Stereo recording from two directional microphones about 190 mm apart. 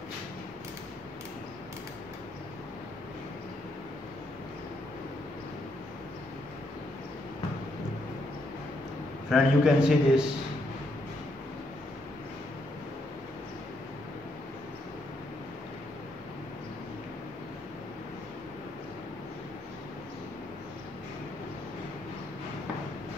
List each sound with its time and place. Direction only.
9.3 s a man's voice: 5° right (ahead or behind)